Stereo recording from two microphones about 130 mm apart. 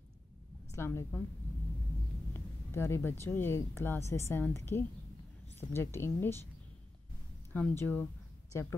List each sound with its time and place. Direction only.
0.7 s a woman's voice: 20° left (ahead or behind)
2.3 s a woman's voice: 20° left (ahead or behind)
7.5 s speech: 15° left (ahead or behind)